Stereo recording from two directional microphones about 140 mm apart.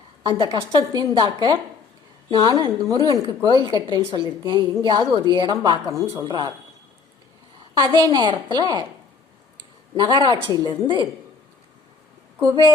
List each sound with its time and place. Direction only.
0.2 s a woman's voice: 35° right (ahead or behind)
7.8 s a woman's voice: 30° right (ahead or behind)
10.0 s a woman's voice: 35° right (ahead or behind)
12.4 s a woman's voice: 30° right (ahead or behind)